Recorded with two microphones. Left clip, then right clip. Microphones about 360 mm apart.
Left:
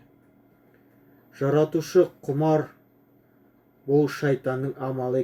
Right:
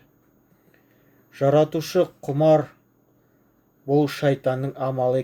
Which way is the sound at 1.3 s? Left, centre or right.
Right.